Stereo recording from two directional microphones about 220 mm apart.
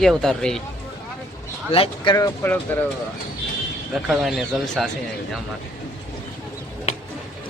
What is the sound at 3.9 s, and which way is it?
Speech, centre (ahead or behind).